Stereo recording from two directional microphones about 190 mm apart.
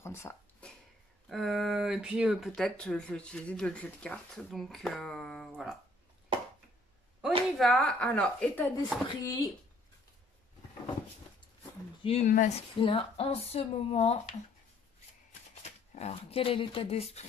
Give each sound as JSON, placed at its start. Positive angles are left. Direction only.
{"t": 0.0, "sound": "a sound", "side_deg": 15}
{"t": 1.3, "sound": "speech", "side_deg": 0}
{"t": 7.2, "sound": "speech", "side_deg": 0}
{"t": 9.0, "sound": "speech", "side_deg": 20}
{"t": 12.0, "sound": "speech", "side_deg": 30}
{"t": 15.6, "sound": "speech", "side_deg": 35}